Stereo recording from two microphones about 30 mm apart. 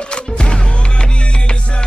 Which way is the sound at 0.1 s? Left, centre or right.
Left.